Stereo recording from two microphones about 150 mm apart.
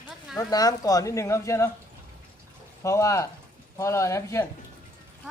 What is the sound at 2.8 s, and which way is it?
Speech, 20° left (ahead or behind).